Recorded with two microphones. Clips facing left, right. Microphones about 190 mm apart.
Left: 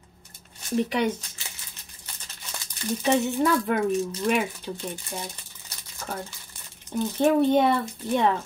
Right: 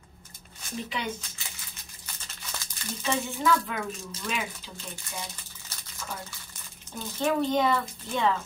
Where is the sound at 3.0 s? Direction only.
60° left (ahead or behind).